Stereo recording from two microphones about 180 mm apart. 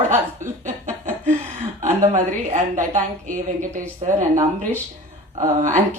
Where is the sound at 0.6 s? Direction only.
40° right (ahead or behind).